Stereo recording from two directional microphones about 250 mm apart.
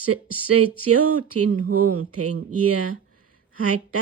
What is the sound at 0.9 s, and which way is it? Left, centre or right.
Speech, right.